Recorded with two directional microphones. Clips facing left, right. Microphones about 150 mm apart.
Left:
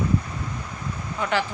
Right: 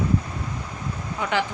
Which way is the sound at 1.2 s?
15° right (ahead or behind).